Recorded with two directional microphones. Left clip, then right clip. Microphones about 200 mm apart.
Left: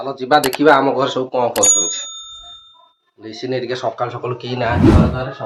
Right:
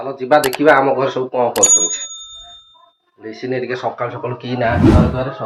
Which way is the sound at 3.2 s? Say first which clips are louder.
Right 1 dB; 10° left (ahead or behind).